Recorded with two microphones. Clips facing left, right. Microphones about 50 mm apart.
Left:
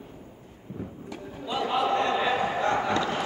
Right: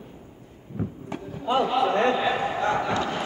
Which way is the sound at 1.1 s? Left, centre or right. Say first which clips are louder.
Right 8 dB; right.